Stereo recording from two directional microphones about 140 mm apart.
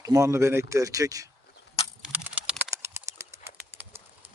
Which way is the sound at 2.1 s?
10° right (ahead or behind).